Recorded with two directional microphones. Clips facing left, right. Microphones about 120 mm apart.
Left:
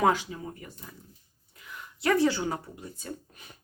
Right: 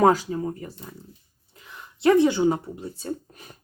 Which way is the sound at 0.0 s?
40° right (ahead or behind).